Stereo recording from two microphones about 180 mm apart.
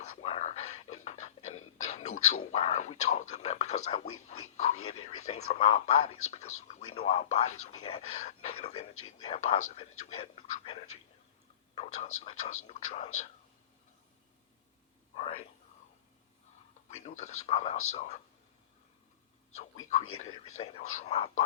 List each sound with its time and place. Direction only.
0.0 s speech: 35° left (ahead or behind)
11.7 s speech: 40° left (ahead or behind)
16.9 s speech: 40° left (ahead or behind)
20.4 s speech: 35° left (ahead or behind)